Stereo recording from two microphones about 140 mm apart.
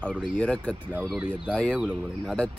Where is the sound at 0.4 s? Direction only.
5° left (ahead or behind).